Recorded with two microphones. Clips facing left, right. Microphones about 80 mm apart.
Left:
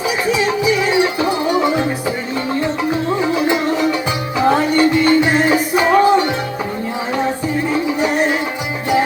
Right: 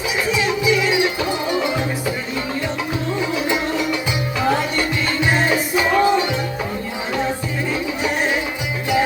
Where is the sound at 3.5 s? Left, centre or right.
Left.